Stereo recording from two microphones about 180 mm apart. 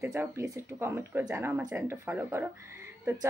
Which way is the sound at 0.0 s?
10° right (ahead or behind).